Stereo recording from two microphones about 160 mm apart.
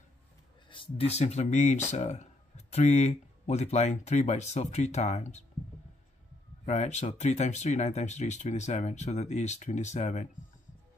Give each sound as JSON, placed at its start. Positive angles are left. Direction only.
{"t": 0.7, "sound": "speech", "side_deg": 35}
{"t": 6.6, "sound": "speech", "side_deg": 45}